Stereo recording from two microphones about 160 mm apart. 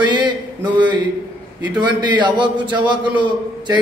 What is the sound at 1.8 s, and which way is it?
Speech, 30° right (ahead or behind).